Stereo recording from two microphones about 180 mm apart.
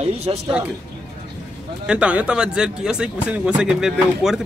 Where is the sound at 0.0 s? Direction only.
35° right (ahead or behind).